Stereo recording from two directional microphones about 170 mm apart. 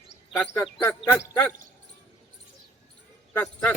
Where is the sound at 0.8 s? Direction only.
10° left (ahead or behind).